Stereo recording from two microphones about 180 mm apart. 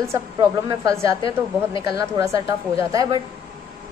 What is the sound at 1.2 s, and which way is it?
Speech, 30° left (ahead or behind).